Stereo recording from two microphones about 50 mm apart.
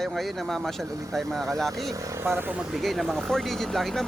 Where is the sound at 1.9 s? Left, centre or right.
Right.